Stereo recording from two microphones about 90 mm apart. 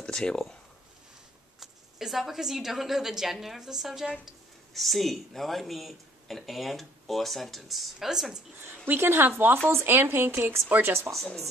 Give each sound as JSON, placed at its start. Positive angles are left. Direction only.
{"t": 0.0, "sound": "speech", "side_deg": 10}
{"t": 1.6, "sound": "speech", "side_deg": -5}
{"t": 8.6, "sound": "speech", "side_deg": -25}
{"t": 11.1, "sound": "speech", "side_deg": 0}